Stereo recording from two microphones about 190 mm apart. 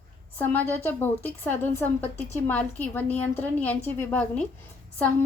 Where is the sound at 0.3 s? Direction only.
10° left (ahead or behind).